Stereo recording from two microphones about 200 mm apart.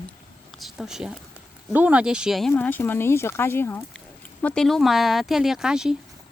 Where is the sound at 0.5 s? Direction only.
Centre (ahead or behind).